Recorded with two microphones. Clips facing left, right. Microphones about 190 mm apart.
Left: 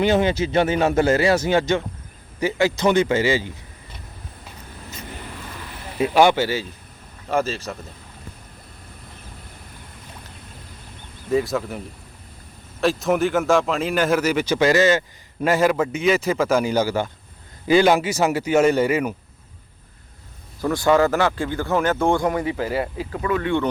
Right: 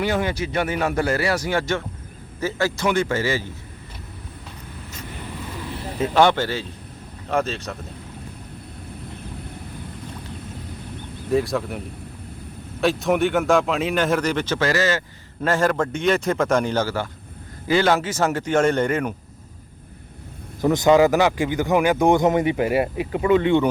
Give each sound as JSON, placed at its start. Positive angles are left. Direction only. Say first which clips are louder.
{"t": 0.0, "sound": "a man's voice", "louder": "left 4 dB", "side_deg": 25}
{"t": 6.0, "sound": "a man's voice", "louder": "left 1 dB", "side_deg": 10}
{"t": 11.3, "sound": "a man's voice", "louder": "even", "side_deg": 0}
{"t": 12.8, "sound": "a man's voice", "louder": "even", "side_deg": 0}
{"t": 20.6, "sound": "speech", "louder": "right 2 dB", "side_deg": -20}